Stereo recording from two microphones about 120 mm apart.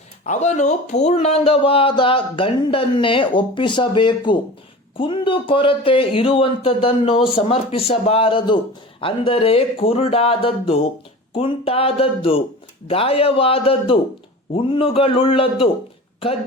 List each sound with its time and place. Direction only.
0.3 s speech: 75° left (ahead or behind); by 15.7 s 50° left (ahead or behind)